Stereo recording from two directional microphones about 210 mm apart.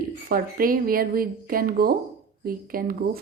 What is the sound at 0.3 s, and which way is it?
Speech, 45° right (ahead or behind).